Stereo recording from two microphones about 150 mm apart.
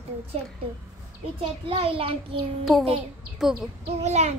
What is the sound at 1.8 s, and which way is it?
Speech, 40° right (ahead or behind).